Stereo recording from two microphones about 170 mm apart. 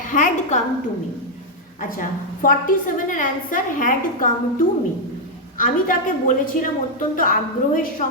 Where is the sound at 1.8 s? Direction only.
55° left (ahead or behind).